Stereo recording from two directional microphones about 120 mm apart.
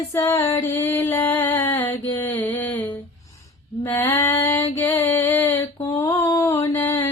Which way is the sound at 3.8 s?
20° left (ahead or behind).